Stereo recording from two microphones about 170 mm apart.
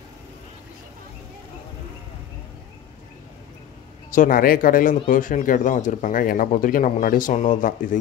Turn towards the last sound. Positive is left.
turn(degrees=50)  # may be behind; listen again after turning